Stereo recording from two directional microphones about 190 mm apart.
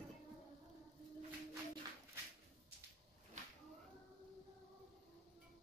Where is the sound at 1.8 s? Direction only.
20° right (ahead or behind).